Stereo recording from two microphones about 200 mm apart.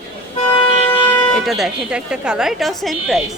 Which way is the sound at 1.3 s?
Centre (ahead or behind).